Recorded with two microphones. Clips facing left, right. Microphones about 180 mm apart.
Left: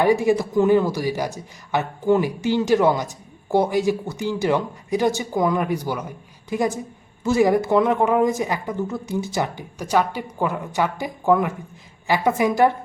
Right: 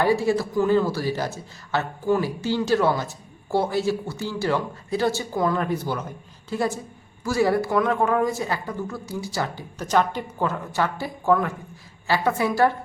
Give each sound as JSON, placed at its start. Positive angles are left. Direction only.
{"t": 0.0, "sound": "a woman's voice", "side_deg": 15}